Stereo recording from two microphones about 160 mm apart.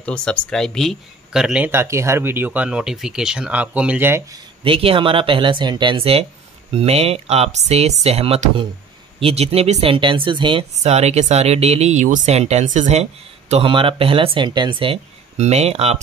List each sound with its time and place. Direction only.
0.0 s speech: 10° left (ahead or behind); by 4.4 s 15° right (ahead or behind)
4.6 s speech: 35° right (ahead or behind)
10.7 s speech: 45° right (ahead or behind)